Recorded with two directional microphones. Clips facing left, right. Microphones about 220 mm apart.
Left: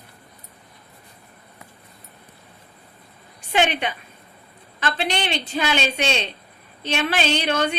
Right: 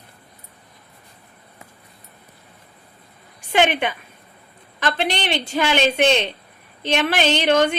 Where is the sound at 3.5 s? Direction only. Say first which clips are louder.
Right 3 dB; 50° right (ahead or behind).